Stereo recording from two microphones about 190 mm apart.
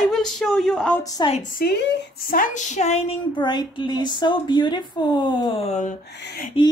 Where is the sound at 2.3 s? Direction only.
40° left (ahead or behind).